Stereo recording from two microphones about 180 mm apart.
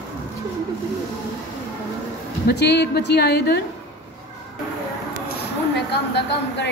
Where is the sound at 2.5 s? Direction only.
70° left (ahead or behind).